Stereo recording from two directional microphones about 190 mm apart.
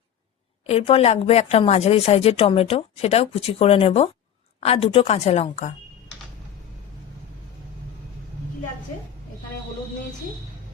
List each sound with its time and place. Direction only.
0.7 s a woman's voice: 30° left (ahead or behind)